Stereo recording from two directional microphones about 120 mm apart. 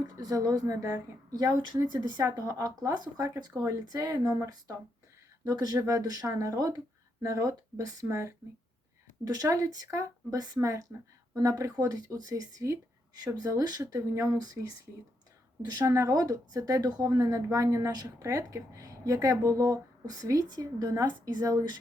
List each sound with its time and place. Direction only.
0.2 s a woman's voice: 30° right (ahead or behind)
15.7 s a woman's voice: 30° right (ahead or behind)